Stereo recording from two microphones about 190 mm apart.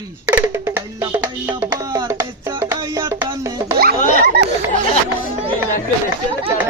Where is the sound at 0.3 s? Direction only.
10° right (ahead or behind).